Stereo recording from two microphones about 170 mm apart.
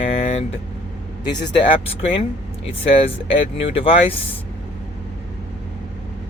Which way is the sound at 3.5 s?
35° left (ahead or behind).